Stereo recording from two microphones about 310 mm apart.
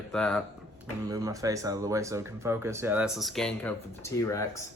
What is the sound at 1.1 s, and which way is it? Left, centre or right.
Speech, centre.